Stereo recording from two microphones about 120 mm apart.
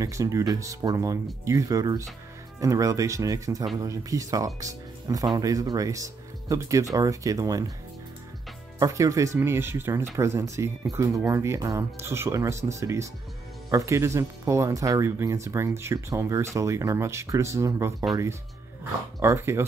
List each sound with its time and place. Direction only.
0.0 s speech: 25° right (ahead or behind)
8.7 s speech: 25° right (ahead or behind)
19.1 s speech: 25° right (ahead or behind)